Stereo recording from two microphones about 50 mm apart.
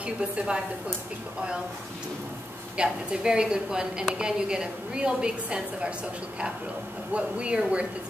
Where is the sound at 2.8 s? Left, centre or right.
Centre.